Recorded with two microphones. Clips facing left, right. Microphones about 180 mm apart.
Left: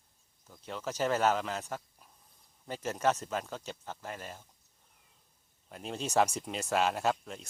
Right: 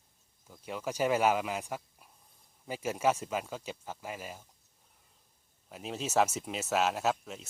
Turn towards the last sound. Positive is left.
turn(degrees=-5)  # may be behind; listen again after turning